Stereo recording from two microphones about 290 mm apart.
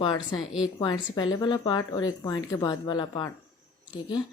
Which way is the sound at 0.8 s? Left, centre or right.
Centre.